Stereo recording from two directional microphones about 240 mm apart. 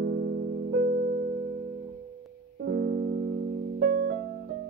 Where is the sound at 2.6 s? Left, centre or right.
Right.